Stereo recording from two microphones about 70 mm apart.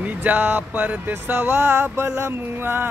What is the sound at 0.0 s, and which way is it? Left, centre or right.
Speech, right.